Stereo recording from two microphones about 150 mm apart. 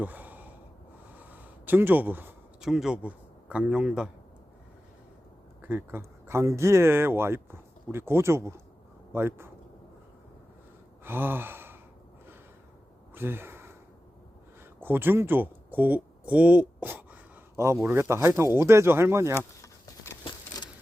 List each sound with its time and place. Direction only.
0.0 s sigh: 10° right (ahead or behind)
1.1 s a sound: 10° right (ahead or behind)
2.6 s speech: 5° right (ahead or behind)
5.6 s speech: 15° right (ahead or behind)
11.0 s sigh: 15° right (ahead or behind)
13.1 s gasp: 15° right (ahead or behind)
14.8 s speech: 15° right (ahead or behind)
19.3 s a sound: 20° left (ahead or behind)
20.2 s patter: 30° left (ahead or behind)